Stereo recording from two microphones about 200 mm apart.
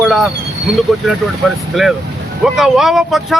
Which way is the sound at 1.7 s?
Centre (ahead or behind).